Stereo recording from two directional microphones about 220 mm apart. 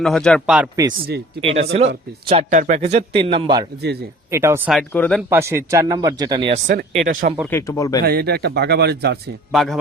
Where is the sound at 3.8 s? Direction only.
50° right (ahead or behind).